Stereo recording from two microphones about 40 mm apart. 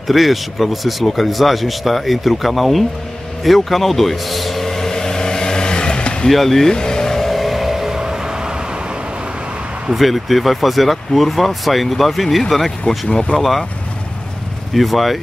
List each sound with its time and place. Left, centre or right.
0.1 s speech: centre
3.4 s vehicle: centre; by 6.2 s left
6.2 s speech: centre
6.7 s vehicle: centre
7.2 s music: centre
8.0 s vehicle: centre
9.9 s speech: centre
13.1 s speech: left
13.4 s speech: centre
14.7 s speech: centre